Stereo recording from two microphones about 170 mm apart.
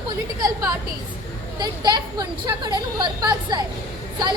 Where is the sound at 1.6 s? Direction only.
25° right (ahead or behind).